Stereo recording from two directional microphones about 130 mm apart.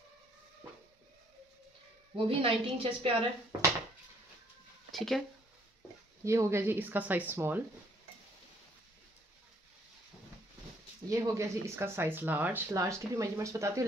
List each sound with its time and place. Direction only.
2.1 s a woman's voice: 45° right (ahead or behind)
4.9 s speech: centre (ahead or behind)
6.2 s speech: 20° right (ahead or behind)
11.1 s speech: 20° right (ahead or behind)